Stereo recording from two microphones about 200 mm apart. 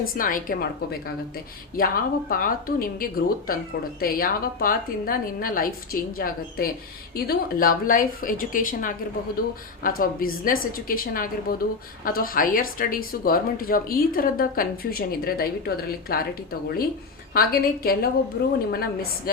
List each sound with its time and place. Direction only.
0.2 s speech: 45° left (ahead or behind)